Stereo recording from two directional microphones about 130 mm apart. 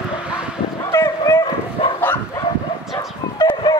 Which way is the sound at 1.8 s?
40° left (ahead or behind).